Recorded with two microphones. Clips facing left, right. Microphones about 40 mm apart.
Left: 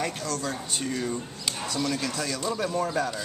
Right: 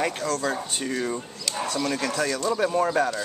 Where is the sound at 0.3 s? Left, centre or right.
Right.